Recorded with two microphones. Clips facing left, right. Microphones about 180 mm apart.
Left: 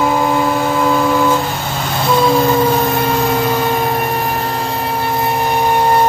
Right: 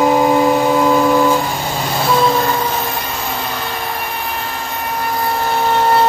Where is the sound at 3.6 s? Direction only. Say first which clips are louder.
Left 8 dB; 45° left (ahead or behind); by 6.1 s 15° left (ahead or behind).